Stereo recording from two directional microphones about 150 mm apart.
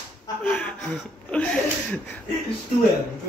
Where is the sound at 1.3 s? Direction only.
10° left (ahead or behind).